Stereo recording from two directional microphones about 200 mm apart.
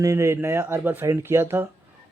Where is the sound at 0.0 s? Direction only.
15° right (ahead or behind).